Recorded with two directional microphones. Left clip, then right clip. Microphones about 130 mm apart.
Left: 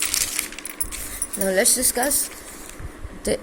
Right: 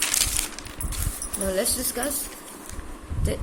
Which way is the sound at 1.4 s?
45° left (ahead or behind).